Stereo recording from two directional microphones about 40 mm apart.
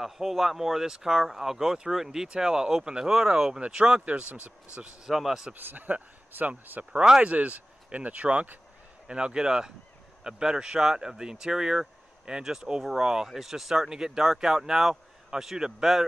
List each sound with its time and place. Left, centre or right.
0.0 s speech: centre; by 4.0 s right
4.0 s speech: right
5.1 s a man's voice: centre
5.5 s a man's voice: right
6.8 s speech: right
9.0 s a man's voice: right; by 16.1 s centre